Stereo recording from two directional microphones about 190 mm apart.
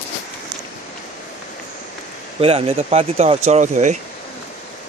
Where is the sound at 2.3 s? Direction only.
30° right (ahead or behind).